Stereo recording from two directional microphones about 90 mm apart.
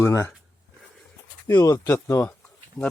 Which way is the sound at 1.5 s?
35° left (ahead or behind).